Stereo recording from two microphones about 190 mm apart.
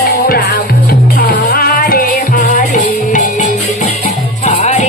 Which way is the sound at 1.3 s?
50° left (ahead or behind).